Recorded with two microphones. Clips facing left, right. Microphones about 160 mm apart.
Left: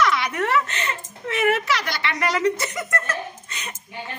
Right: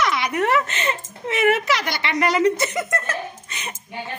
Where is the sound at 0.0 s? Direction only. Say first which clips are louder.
Right 1 dB; 15° right (ahead or behind).